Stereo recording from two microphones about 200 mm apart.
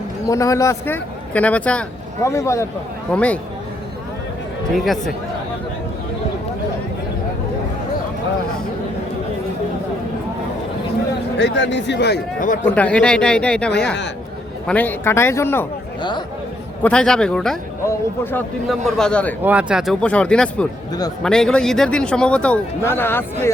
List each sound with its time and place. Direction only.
0.3 s a man's voice: 15° left (ahead or behind)
4.7 s a man's voice: centre (ahead or behind)
11.3 s speech: 60° left (ahead or behind)
12.6 s a man's voice: 5° left (ahead or behind)
14.7 s a man's voice: 10° left (ahead or behind)
16.0 s a man's voice: 20° left (ahead or behind)
16.8 s a man's voice: 5° left (ahead or behind)
18.7 s a man's voice: centre (ahead or behind)
19.4 s a man's voice: 5° right (ahead or behind); by 23.5 s 10° left (ahead or behind)